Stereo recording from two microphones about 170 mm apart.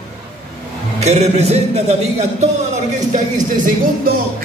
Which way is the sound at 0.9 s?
40° right (ahead or behind).